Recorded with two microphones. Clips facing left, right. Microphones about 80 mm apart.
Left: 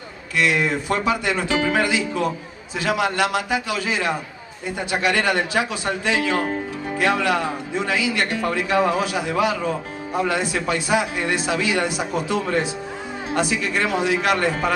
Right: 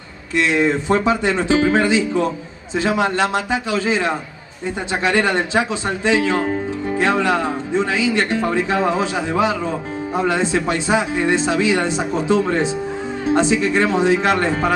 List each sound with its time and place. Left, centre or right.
0.4 s speech: right